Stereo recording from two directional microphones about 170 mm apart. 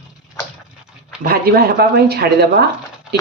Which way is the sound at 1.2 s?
60° right (ahead or behind).